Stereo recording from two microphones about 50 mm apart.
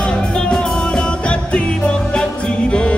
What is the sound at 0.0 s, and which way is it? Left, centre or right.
Music, centre.